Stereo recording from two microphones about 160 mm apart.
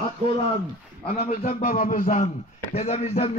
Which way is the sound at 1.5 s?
60° left (ahead or behind).